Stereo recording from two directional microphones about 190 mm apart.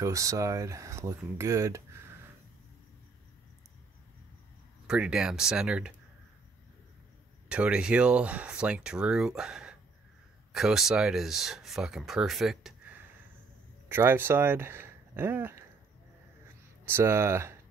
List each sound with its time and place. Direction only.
0.0 s speech: 15° right (ahead or behind)
4.8 s speech: 5° right (ahead or behind)
7.4 s speech: 5° right (ahead or behind)
13.8 s speech: 10° right (ahead or behind)
16.8 s speech: 15° right (ahead or behind)